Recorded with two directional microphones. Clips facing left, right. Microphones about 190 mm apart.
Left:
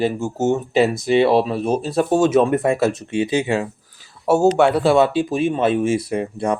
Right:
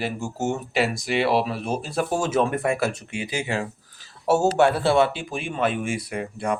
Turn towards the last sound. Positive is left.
turn(degrees=25)  # may be behind; listen again after turning